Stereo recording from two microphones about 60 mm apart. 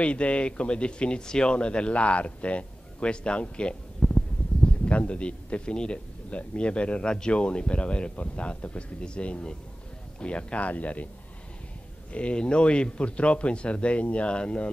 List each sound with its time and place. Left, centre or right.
0.0 s speech: centre
12.1 s speech: centre